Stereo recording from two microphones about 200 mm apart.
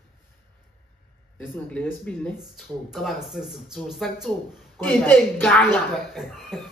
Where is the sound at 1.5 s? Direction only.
10° left (ahead or behind).